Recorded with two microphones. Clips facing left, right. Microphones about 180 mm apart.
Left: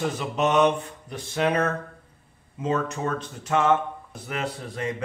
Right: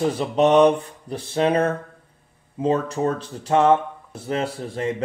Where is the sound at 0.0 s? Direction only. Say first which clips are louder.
Right 6 dB; 35° right (ahead or behind).